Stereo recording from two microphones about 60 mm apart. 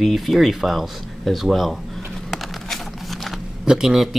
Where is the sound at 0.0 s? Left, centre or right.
Centre.